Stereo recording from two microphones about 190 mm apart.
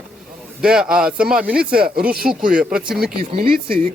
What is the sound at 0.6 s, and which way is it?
Speech, 5° right (ahead or behind).